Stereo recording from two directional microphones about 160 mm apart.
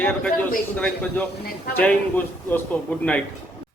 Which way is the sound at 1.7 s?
10° left (ahead or behind).